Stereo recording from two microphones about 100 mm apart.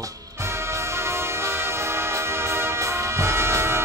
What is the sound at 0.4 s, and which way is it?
Music, 25° right (ahead or behind).